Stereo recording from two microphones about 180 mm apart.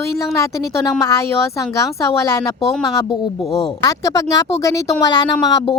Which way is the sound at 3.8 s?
20° left (ahead or behind).